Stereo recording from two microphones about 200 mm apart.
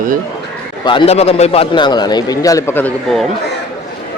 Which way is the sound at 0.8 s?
25° left (ahead or behind).